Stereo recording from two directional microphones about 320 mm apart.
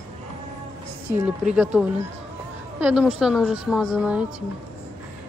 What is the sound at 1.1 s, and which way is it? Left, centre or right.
A woman's voice, centre.